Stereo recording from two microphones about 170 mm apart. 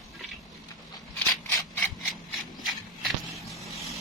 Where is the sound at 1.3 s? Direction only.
20° left (ahead or behind).